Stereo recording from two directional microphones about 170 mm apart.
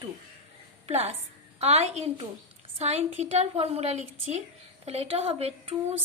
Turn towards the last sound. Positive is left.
turn(degrees=-35)  # may be behind; listen again after turning